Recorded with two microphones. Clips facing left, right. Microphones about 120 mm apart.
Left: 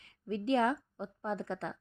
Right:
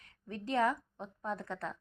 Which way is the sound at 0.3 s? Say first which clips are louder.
Left 2 dB; 25° left (ahead or behind).